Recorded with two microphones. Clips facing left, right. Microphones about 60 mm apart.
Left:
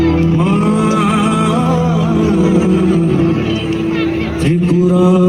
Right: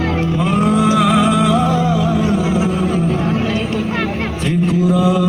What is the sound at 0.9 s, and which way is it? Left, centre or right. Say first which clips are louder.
Music: even; left.